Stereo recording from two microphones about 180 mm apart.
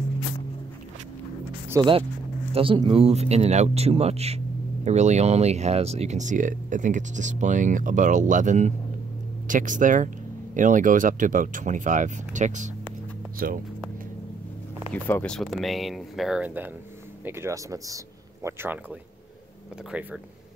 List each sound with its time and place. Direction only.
1.7 s speech: 25° right (ahead or behind); by 13.6 s 50° right (ahead or behind)
15.0 s speech: 10° left (ahead or behind); by 18.8 s 15° right (ahead or behind)
19.9 s speech: 10° right (ahead or behind)